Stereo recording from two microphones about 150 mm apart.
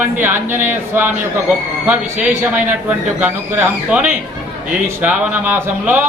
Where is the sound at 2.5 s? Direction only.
10° right (ahead or behind).